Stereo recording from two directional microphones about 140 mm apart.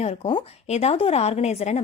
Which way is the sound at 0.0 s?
45° left (ahead or behind).